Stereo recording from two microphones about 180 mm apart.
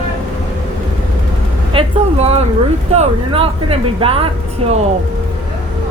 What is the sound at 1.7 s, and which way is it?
A woman's voice, 35° right (ahead or behind).